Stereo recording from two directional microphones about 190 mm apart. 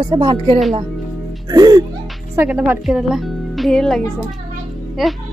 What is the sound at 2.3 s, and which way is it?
Speech, 10° right (ahead or behind).